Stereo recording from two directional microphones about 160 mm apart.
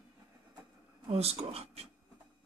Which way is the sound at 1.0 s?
40° right (ahead or behind).